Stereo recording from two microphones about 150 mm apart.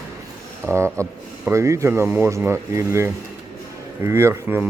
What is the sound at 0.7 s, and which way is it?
Speech, 20° right (ahead or behind).